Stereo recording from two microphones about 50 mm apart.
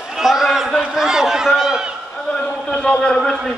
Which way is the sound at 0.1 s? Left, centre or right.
Centre.